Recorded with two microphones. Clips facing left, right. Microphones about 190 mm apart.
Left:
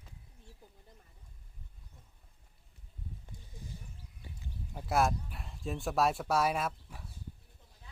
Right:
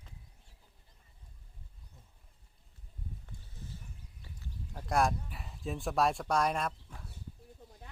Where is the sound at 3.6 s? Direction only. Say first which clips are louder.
Left 1 dB; 15° left (ahead or behind).